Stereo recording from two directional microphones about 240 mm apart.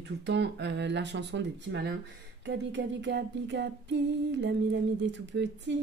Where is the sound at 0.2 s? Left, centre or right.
Right.